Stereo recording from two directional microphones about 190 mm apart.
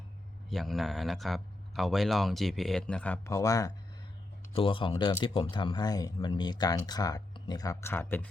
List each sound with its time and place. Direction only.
0.5 s speech: centre (ahead or behind)
3.3 s speech: 20° left (ahead or behind)